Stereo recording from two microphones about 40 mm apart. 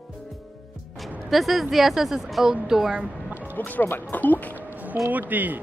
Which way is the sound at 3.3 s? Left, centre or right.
Right.